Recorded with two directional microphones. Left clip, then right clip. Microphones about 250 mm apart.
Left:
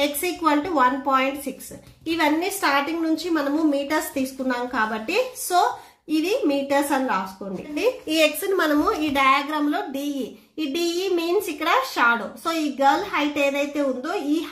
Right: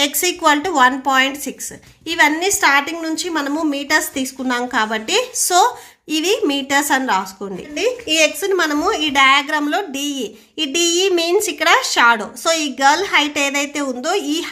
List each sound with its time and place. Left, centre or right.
0.0 s a woman's voice: right
7.7 s a woman's voice: centre